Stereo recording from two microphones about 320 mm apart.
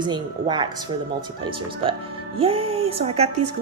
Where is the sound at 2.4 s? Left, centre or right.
Centre.